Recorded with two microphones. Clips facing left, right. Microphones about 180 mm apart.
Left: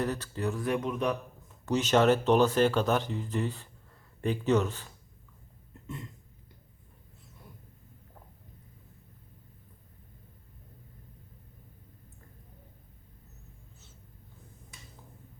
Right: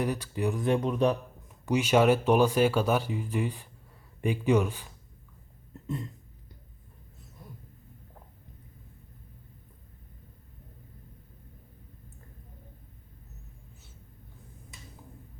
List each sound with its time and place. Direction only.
0.0 s speech: 10° right (ahead or behind)
0.7 s speech: 30° right (ahead or behind)
1.6 s speech: 10° right (ahead or behind)